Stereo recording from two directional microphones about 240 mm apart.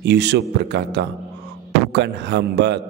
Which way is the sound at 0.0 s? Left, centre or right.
Right.